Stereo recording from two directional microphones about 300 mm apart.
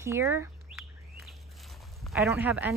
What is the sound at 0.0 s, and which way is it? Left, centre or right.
Speech, centre.